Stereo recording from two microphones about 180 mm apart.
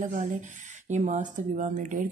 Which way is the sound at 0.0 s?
45° right (ahead or behind).